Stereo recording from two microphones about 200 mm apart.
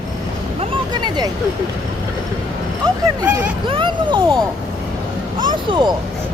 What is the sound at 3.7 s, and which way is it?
Speech, 25° right (ahead or behind).